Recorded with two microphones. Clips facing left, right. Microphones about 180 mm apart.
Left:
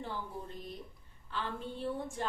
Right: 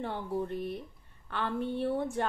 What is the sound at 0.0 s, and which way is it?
A woman's voice, 65° right (ahead or behind).